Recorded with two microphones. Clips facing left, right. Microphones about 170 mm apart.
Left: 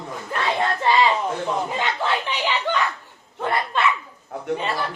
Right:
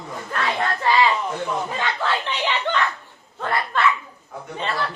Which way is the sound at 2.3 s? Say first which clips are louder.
Even; 10° left (ahead or behind).